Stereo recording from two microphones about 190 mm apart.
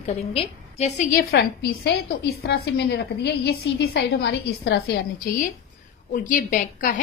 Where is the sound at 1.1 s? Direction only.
55° left (ahead or behind).